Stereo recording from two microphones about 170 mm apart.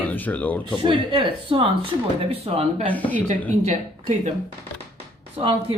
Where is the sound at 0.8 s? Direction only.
30° right (ahead or behind).